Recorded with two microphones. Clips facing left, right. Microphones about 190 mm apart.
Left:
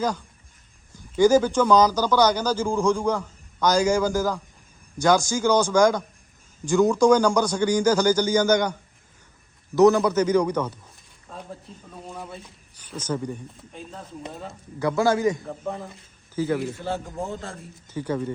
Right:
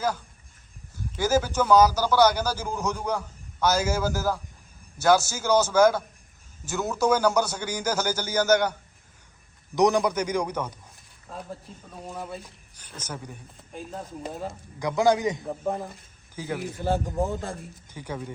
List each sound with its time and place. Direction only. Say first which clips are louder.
1.2 s a man's voice: left 6 dB; 5° right (ahead or behind)
9.7 s a man's voice: left 5 dB; 15° right (ahead or behind)
12.8 s a sound: left 7 dB; 10° left (ahead or behind)
13.7 s a man's voice: right 3 dB; 10° right (ahead or behind)